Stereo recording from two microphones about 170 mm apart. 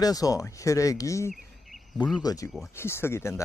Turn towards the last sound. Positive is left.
turn(degrees=15)  # may be behind; listen again after turning